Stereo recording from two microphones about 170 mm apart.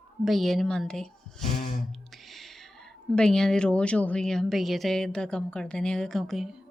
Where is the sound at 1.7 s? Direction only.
Centre (ahead or behind).